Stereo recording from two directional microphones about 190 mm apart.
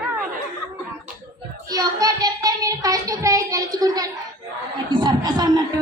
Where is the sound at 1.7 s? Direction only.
20° right (ahead or behind).